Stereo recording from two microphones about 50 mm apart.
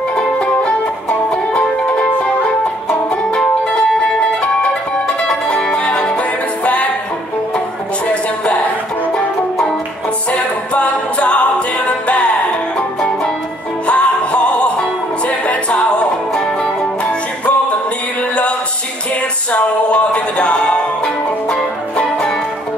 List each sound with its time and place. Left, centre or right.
1.3 s music: left
5.5 s music: centre
10.3 s a capella: left
12.7 s music: centre
19.5 s music: left